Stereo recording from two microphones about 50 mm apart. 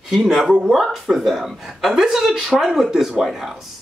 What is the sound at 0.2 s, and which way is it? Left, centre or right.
Speech, centre.